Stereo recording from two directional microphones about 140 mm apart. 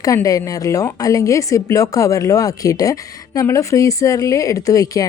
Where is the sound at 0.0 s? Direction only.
25° left (ahead or behind).